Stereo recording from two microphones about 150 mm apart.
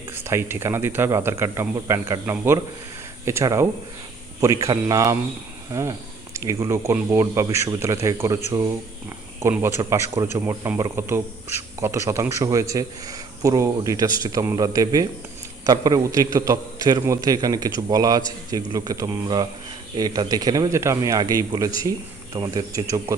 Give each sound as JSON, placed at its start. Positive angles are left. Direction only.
{"t": 0.3, "sound": "a man's voice", "side_deg": -15}